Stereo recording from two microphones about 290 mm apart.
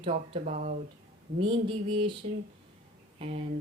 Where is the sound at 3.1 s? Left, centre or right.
Centre.